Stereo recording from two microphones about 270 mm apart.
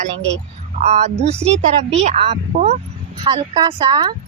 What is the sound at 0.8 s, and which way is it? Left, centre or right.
A woman's voice, right.